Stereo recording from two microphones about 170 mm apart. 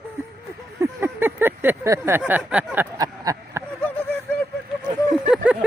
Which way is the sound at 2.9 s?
20° right (ahead or behind).